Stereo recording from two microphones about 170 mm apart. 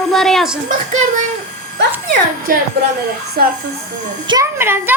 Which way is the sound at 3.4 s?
65° right (ahead or behind).